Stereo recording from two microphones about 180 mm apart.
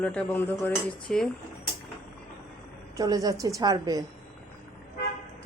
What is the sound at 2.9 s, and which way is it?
A woman's voice, 20° right (ahead or behind).